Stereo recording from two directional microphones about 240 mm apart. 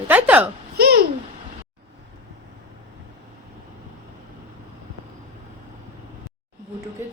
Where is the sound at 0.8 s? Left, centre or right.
Right.